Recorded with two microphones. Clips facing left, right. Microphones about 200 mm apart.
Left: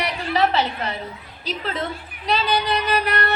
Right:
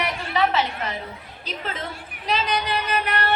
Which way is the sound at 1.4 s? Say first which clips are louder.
Left 5 dB; 35° left (ahead or behind).